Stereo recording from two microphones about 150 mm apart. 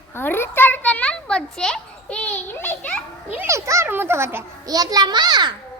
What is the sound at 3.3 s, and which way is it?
A child's voice, 15° right (ahead or behind).